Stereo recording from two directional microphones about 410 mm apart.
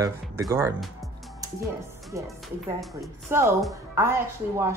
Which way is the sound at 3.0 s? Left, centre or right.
Centre.